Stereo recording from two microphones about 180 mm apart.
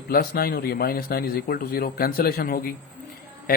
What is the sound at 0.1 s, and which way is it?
Speech, 55° left (ahead or behind).